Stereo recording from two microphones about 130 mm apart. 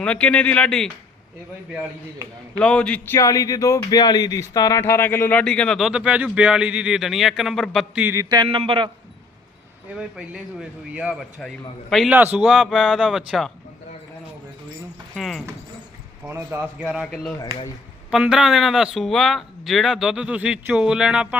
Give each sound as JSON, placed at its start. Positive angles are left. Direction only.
{"t": 0.0, "sound": "speech", "side_deg": 10}
{"t": 2.6, "sound": "speech", "side_deg": 10}
{"t": 3.2, "sound": "speech", "side_deg": 25}
{"t": 7.9, "sound": "speech", "side_deg": -15}
{"t": 8.2, "sound": "a man's voice", "side_deg": -30}
{"t": 8.4, "sound": "a man's voice", "side_deg": -45}
{"t": 10.0, "sound": "speech", "side_deg": -5}
{"t": 12.0, "sound": "speech", "side_deg": -10}
{"t": 12.4, "sound": "speech", "side_deg": 0}
{"t": 15.1, "sound": "speech", "side_deg": 0}
{"t": 16.2, "sound": "speech", "side_deg": -15}
{"t": 18.1, "sound": "speech", "side_deg": -5}